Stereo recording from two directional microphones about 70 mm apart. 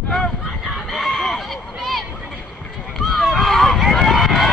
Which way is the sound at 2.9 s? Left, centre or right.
Centre.